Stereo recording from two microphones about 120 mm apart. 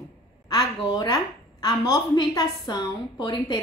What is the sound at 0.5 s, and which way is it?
A woman's voice, 35° left (ahead or behind).